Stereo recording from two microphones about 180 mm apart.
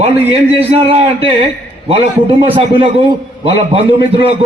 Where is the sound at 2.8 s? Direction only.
30° right (ahead or behind).